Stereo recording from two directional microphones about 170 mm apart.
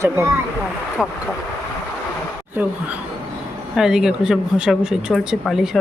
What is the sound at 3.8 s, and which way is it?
Speech, 5° right (ahead or behind).